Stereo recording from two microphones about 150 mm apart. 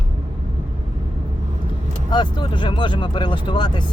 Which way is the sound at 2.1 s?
30° left (ahead or behind).